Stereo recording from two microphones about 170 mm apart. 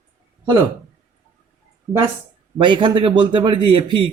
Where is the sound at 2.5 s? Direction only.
30° right (ahead or behind).